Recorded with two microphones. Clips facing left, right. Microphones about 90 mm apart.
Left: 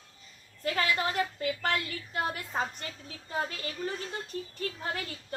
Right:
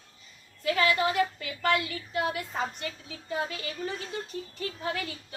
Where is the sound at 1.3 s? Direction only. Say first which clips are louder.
Right 3 dB; 40° left (ahead or behind).